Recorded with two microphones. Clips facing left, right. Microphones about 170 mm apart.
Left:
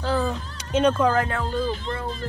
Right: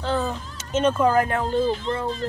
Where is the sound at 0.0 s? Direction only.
Centre (ahead or behind).